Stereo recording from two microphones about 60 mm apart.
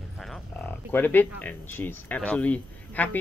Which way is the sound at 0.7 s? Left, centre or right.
Left.